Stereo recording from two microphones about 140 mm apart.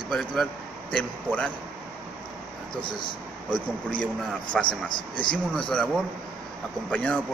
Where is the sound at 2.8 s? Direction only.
35° left (ahead or behind).